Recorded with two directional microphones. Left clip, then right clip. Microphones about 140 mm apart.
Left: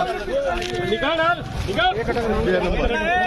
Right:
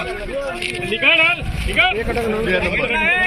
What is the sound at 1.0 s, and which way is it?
Speech, 30° left (ahead or behind).